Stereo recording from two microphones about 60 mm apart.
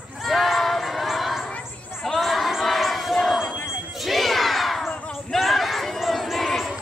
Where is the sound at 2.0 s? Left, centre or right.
Centre.